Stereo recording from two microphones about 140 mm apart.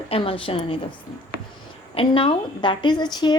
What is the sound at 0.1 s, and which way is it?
Speech, 40° left (ahead or behind).